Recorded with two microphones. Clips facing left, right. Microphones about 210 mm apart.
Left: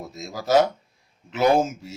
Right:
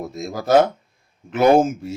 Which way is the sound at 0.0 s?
55° right (ahead or behind).